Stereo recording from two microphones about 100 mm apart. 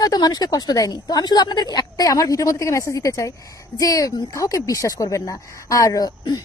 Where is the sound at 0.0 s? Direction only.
40° left (ahead or behind).